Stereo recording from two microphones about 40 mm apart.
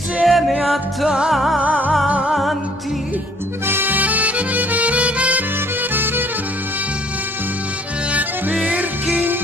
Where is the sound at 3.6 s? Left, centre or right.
Right.